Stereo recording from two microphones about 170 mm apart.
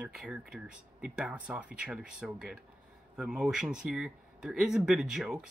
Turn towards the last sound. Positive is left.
turn(degrees=-5)  # may be behind; listen again after turning